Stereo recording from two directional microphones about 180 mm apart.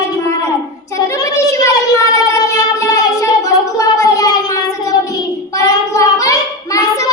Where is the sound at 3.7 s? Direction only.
20° left (ahead or behind).